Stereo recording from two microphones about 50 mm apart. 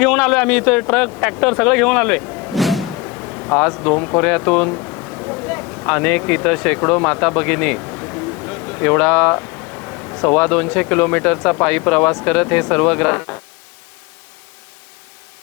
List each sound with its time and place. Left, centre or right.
0.0 s a man's voice: centre
2.6 s vehicle: centre
3.1 s a sound: left
3.8 s a man's voice: left